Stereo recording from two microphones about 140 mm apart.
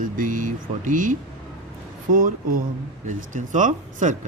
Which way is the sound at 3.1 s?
65° right (ahead or behind).